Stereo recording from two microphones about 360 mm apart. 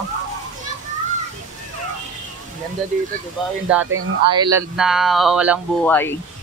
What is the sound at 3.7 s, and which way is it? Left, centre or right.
Speech, centre.